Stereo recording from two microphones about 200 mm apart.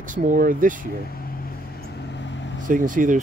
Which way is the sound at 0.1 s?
40° right (ahead or behind).